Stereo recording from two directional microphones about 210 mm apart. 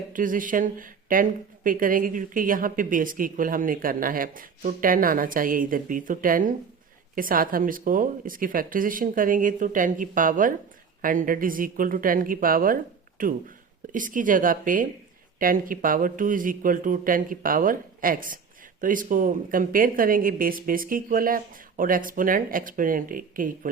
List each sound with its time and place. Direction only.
0.1 s speech: 40° right (ahead or behind)